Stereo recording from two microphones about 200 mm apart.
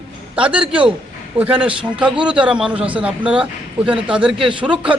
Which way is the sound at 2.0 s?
5° right (ahead or behind).